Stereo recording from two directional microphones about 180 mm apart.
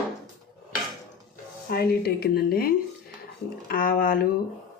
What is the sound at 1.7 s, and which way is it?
Speech, 55° left (ahead or behind).